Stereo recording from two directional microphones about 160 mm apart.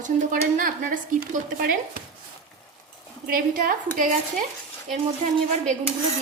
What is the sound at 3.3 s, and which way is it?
Speech, 60° right (ahead or behind).